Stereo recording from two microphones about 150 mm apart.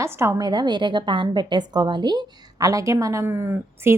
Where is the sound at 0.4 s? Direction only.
30° right (ahead or behind).